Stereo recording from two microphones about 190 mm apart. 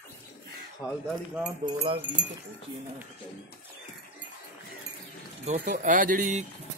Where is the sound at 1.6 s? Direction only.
30° right (ahead or behind).